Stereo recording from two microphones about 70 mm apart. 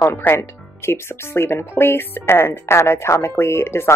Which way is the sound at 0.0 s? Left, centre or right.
Left.